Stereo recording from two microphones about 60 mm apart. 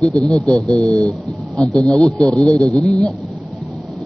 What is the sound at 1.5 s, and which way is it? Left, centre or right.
Speech, right.